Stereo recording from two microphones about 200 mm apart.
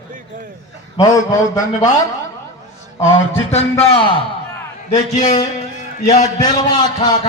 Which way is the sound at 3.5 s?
30° left (ahead or behind).